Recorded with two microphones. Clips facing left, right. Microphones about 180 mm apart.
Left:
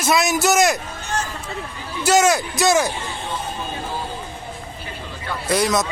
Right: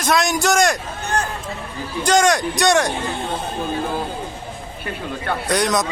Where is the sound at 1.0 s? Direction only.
60° right (ahead or behind).